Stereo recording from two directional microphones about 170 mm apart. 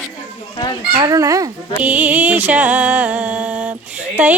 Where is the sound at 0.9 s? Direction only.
20° right (ahead or behind).